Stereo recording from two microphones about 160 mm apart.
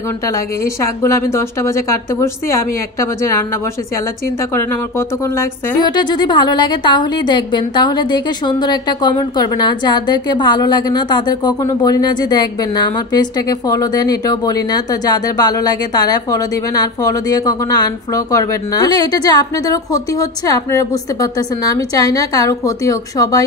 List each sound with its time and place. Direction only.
1.0 s a woman's voice: 15° left (ahead or behind)
4.9 s a woman's voice: 15° left (ahead or behind)
5.9 s a woman's voice: 30° left (ahead or behind)